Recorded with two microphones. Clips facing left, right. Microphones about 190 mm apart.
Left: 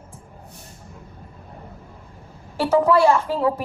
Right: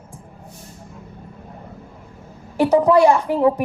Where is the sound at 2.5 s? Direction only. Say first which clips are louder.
Right 3 dB; 15° right (ahead or behind).